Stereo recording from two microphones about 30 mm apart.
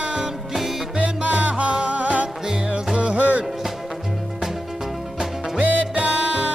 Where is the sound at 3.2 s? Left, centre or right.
Right.